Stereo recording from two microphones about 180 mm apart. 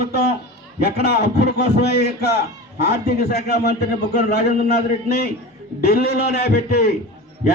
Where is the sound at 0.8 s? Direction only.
65° left (ahead or behind).